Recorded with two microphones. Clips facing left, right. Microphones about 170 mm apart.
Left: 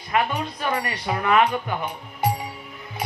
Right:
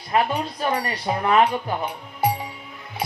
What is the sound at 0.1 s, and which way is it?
A woman's voice, 35° right (ahead or behind).